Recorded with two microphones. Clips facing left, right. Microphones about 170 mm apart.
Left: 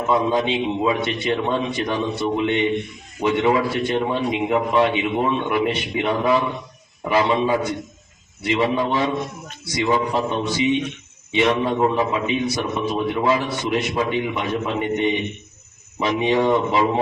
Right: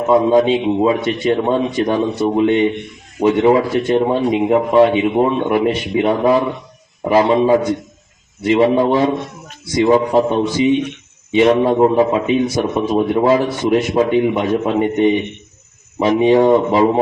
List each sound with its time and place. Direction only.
0.1 s a man's voice: 45° right (ahead or behind)